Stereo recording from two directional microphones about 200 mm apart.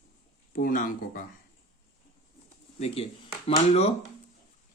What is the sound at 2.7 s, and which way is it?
Speech, 30° left (ahead or behind).